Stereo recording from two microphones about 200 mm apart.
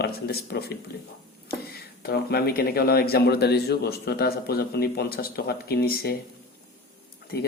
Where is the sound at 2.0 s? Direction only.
50° left (ahead or behind).